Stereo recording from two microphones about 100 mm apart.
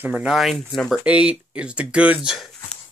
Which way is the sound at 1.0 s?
10° right (ahead or behind).